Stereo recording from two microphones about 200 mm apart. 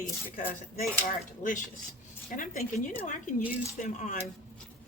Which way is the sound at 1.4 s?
35° left (ahead or behind).